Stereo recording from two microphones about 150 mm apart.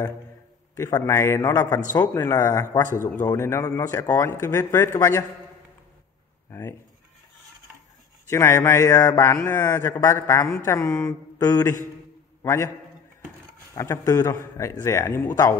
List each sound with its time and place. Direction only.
0.7 s a man's voice: 20° left (ahead or behind)
8.3 s a man's voice: 15° left (ahead or behind)
13.7 s a man's voice: 20° left (ahead or behind)